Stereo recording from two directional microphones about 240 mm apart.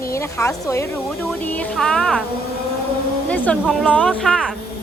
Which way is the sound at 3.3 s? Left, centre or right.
Centre.